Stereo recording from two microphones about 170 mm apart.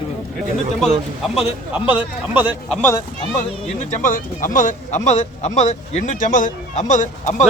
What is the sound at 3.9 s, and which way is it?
A man's voice, 50° left (ahead or behind).